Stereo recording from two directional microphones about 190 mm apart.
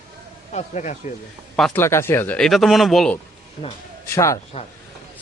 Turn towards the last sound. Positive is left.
turn(degrees=30)  # may be behind; listen again after turning